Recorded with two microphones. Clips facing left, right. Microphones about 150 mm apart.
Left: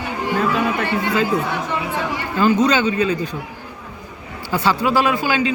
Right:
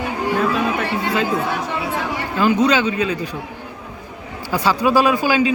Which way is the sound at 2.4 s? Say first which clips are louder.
Even; 5° right (ahead or behind).